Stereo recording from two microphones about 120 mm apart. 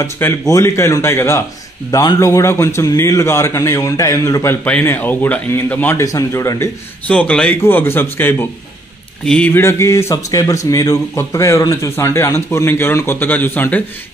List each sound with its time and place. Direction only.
0.0 s a man's voice: 25° left (ahead or behind)
5.9 s a man's voice: 25° left (ahead or behind)
7.1 s a man's voice: 10° left (ahead or behind)
9.2 s speech: 5° left (ahead or behind)
9.5 s a man's voice: 20° left (ahead or behind)